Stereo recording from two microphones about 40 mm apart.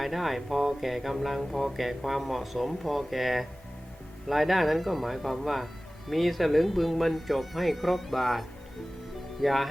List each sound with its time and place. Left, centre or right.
0.0 s speech: centre